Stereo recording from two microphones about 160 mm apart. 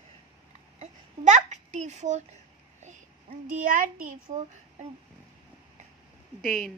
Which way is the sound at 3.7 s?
60° right (ahead or behind).